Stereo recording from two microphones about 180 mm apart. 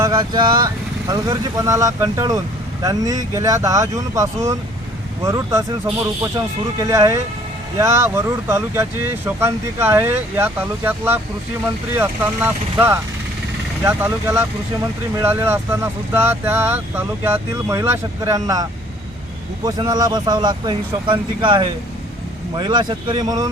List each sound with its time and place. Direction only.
0.0 s speech: 25° right (ahead or behind)
6.7 s speech: 15° right (ahead or behind)